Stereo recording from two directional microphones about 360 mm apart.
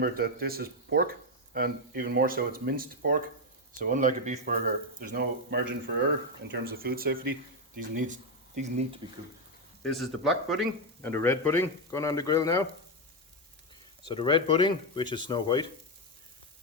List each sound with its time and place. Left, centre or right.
0.0 s speech: right
9.8 s speech: centre
14.0 s speech: centre